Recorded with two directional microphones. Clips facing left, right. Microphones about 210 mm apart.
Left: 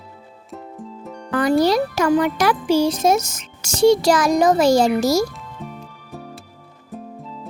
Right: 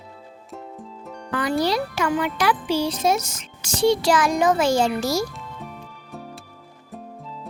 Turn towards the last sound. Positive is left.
turn(degrees=0)  # may be behind; listen again after turning